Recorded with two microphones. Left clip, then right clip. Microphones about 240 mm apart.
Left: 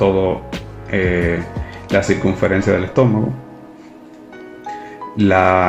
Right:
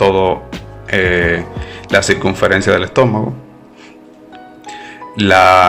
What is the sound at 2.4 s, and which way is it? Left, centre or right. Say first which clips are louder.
Speech: right 5 dB; right.